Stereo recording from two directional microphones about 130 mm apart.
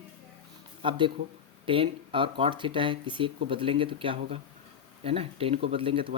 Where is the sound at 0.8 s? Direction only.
40° right (ahead or behind).